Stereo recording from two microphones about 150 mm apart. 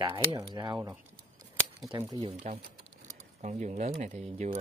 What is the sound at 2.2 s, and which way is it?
Speech, 40° right (ahead or behind).